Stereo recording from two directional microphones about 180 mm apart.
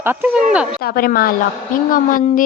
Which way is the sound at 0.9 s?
55° left (ahead or behind).